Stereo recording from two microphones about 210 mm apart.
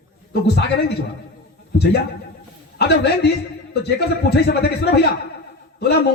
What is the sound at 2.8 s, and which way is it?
Speech, 50° left (ahead or behind).